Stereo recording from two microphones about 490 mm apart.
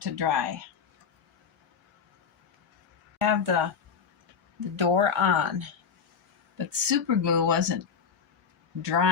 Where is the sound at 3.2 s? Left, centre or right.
Right.